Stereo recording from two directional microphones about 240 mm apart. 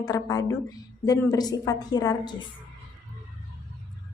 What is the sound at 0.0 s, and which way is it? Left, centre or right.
A woman's voice, centre.